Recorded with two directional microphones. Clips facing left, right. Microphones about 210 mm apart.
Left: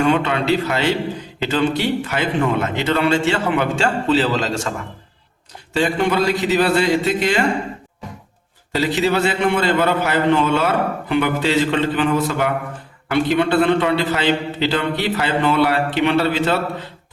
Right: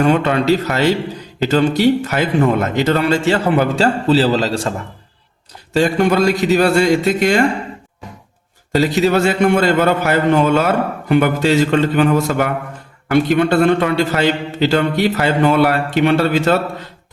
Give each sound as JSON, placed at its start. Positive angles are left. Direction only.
{"t": 0.0, "sound": "speech", "side_deg": -40}
{"t": 5.7, "sound": "a man's voice", "side_deg": -45}
{"t": 8.7, "sound": "a man's voice", "side_deg": -45}